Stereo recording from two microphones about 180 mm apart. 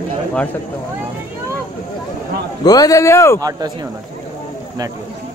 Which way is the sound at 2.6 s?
20° left (ahead or behind).